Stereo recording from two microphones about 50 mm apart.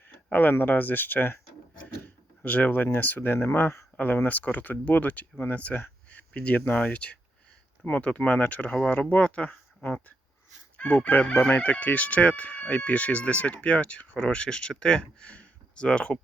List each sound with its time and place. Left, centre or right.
0.3 s speech: left
5.5 s chicken: left
5.8 s speech: left
7.9 s chicken: left
8.9 s speech: left
10.8 s chicken: left